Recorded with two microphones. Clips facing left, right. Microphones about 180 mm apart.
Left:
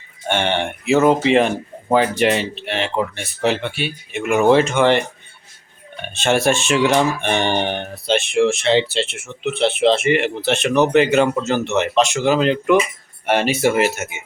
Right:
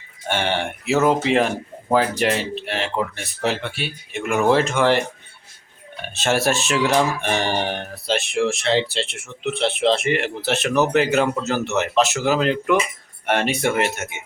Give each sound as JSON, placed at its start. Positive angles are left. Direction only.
{"t": 0.3, "sound": "speech", "side_deg": -5}
{"t": 6.1, "sound": "speech", "side_deg": 0}